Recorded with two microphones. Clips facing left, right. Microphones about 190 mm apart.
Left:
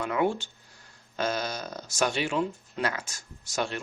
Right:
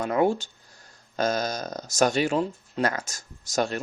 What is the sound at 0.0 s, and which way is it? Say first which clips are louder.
Speech: right 4 dB; 40° right (ahead or behind).